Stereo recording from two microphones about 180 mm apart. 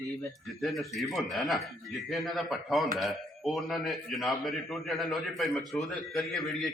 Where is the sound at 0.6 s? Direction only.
Centre (ahead or behind).